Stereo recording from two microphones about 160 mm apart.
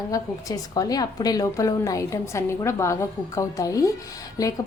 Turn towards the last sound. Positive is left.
turn(degrees=25)  # may be behind; listen again after turning